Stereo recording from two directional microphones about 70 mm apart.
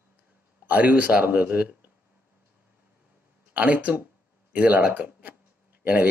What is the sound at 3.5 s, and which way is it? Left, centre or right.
Speech, right.